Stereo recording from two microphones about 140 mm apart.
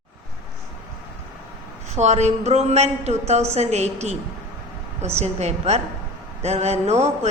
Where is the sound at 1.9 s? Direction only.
55° right (ahead or behind).